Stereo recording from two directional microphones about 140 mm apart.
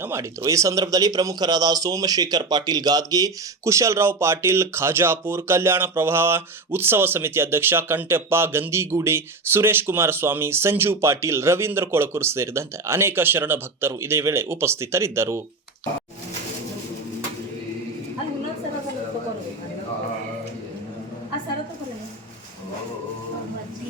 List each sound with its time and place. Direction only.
0.0 s speech: 20° right (ahead or behind)